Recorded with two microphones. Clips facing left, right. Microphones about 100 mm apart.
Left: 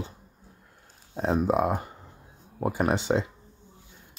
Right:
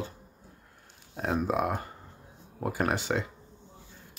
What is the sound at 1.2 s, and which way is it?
Speech, 25° left (ahead or behind).